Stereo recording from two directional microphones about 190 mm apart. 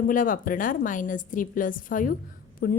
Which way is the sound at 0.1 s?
45° left (ahead or behind).